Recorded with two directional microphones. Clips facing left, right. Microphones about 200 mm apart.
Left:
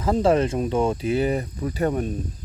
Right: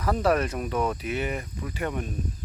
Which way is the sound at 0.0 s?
25° left (ahead or behind).